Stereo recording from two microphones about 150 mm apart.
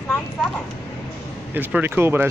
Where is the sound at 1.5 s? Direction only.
15° right (ahead or behind).